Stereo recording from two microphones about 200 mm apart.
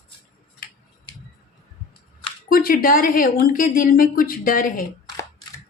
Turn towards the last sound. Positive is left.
turn(degrees=45)  # may be behind; listen again after turning